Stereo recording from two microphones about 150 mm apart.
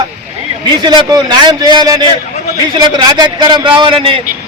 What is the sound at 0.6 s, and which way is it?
A man's voice, 30° right (ahead or behind).